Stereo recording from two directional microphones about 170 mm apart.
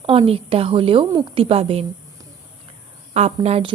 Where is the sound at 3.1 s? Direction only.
40° right (ahead or behind).